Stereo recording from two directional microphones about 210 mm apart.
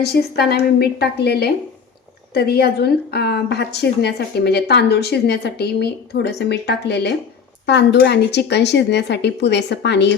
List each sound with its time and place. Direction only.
0.0 s a woman's voice: 50° left (ahead or behind)